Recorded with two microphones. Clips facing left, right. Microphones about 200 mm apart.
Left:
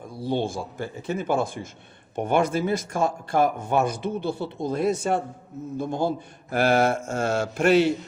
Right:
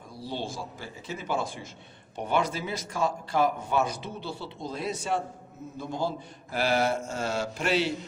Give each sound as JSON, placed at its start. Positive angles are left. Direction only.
{"t": 0.2, "sound": "speech", "side_deg": 55}